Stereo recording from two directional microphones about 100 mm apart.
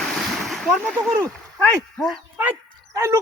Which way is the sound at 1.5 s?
Centre (ahead or behind).